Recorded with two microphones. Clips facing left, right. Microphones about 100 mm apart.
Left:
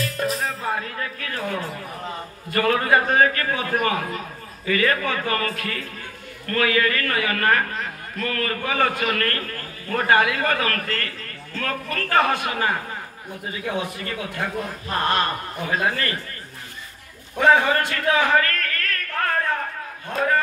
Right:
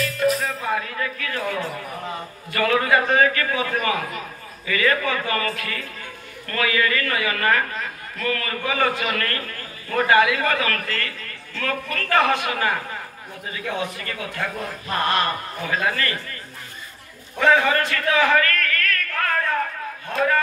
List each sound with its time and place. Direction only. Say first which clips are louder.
0.0 s music: right 3 dB; 35° left (ahead or behind)
2.5 s a man's voice: even; 40° left (ahead or behind)
17.4 s a man's voice: left 1 dB; 25° left (ahead or behind)